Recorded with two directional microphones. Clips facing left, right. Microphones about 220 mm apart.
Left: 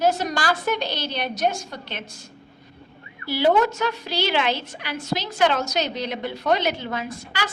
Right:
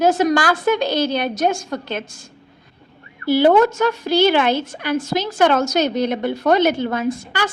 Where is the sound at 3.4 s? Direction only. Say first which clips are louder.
Right 5 dB; 50° right (ahead or behind).